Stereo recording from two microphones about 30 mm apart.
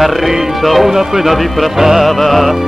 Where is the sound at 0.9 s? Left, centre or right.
Centre.